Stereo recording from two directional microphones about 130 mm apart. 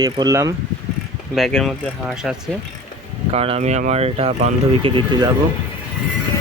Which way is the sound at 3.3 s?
50° right (ahead or behind).